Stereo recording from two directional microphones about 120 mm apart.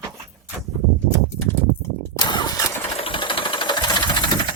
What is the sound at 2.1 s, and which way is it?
Engine starting, 40° left (ahead or behind).